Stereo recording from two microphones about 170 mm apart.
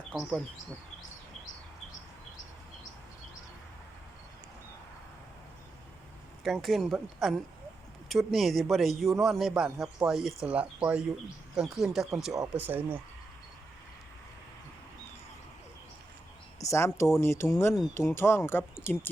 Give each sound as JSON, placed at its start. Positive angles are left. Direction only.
{"t": 0.1, "sound": "speech", "side_deg": 0}
{"t": 6.4, "sound": "speech", "side_deg": 0}
{"t": 16.6, "sound": "speech", "side_deg": 15}